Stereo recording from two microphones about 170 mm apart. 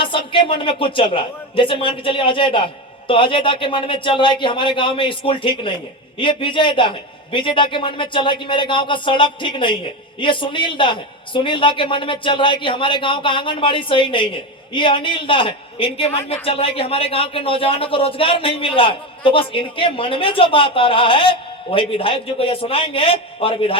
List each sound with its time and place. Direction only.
0.0 s a man's voice: 30° left (ahead or behind)